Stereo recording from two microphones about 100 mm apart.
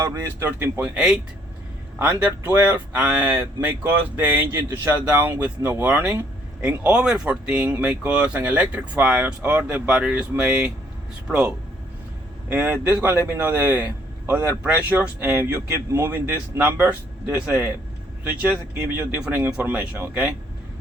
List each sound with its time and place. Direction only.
0.0 s speech: 30° right (ahead or behind)
0.8 s speech: 10° right (ahead or behind)
2.4 s speech: 20° right (ahead or behind)
18.9 s speech: 15° right (ahead or behind)